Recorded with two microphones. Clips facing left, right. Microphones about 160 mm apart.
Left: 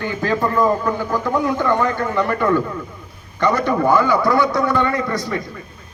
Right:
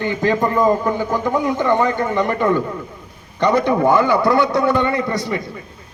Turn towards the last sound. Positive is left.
turn(degrees=-20)  # may be behind; listen again after turning